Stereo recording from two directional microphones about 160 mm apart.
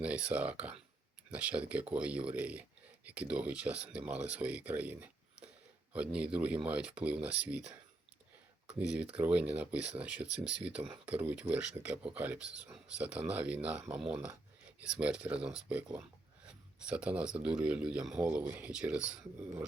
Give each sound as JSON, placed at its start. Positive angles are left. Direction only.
{"t": 0.0, "sound": "speech", "side_deg": -10}
{"t": 8.8, "sound": "speech", "side_deg": -5}